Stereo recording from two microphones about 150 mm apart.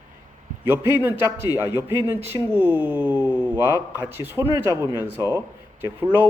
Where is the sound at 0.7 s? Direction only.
15° right (ahead or behind).